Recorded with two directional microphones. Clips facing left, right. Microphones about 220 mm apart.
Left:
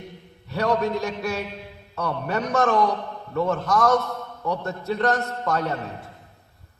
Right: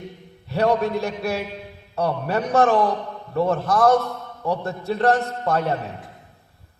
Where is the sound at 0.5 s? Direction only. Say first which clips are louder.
Right 3 dB; 30° right (ahead or behind).